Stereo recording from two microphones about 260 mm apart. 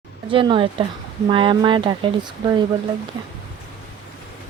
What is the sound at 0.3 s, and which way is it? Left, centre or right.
Speech, centre.